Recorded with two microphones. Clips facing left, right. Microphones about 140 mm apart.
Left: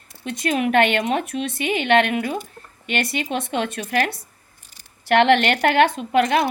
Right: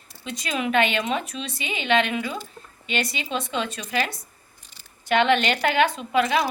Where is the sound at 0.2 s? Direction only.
55° left (ahead or behind).